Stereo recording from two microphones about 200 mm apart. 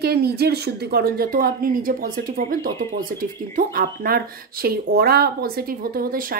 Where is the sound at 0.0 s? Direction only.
55° right (ahead or behind).